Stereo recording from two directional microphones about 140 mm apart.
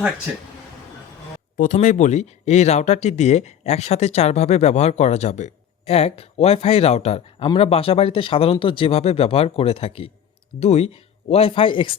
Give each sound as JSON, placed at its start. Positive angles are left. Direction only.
{"t": 0.3, "sound": "speech", "side_deg": -5}
{"t": 1.5, "sound": "speech", "side_deg": 65}